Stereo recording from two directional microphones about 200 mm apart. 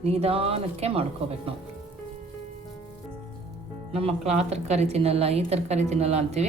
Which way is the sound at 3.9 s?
30° right (ahead or behind).